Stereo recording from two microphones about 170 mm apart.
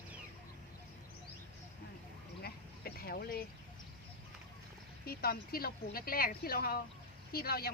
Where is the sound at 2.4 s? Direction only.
65° left (ahead or behind).